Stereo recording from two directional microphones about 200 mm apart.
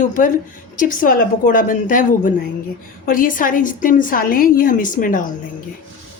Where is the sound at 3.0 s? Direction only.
45° left (ahead or behind).